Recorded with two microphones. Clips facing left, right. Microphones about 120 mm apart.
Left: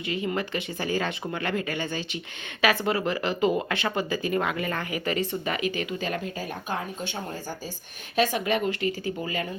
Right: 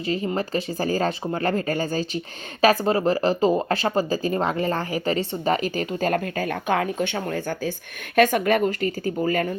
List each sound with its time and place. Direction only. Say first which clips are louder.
0.0 s speech: right 4 dB; 35° right (ahead or behind); by 7.7 s 65° right (ahead or behind)
8.1 s speech: right 6 dB; 55° right (ahead or behind)